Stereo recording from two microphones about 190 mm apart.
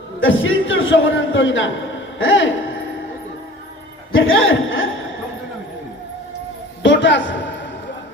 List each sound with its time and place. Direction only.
0.2 s a man's voice: 90° left
4.1 s a man's voice: 90° left
6.8 s a sound: 70° left (ahead or behind)